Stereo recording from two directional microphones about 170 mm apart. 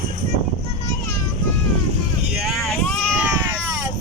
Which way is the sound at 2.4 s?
Centre (ahead or behind).